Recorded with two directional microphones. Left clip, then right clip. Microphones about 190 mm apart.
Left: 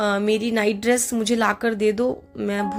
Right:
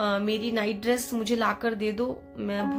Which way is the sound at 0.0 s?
30° left (ahead or behind).